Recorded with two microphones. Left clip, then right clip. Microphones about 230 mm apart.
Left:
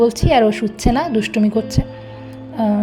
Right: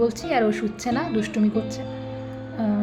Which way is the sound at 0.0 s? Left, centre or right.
Left.